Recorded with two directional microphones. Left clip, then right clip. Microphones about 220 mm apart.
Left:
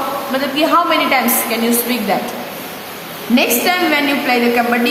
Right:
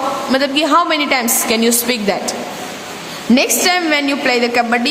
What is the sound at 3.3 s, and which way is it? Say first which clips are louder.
A woman's voice: even; 50° right (ahead or behind).